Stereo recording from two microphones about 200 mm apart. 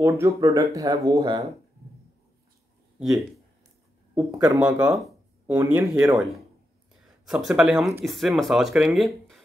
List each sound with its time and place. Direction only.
0.0 s speech: 15° right (ahead or behind)
3.0 s speech: centre (ahead or behind)
4.1 s speech: 10° right (ahead or behind)
7.2 s speech: 5° right (ahead or behind)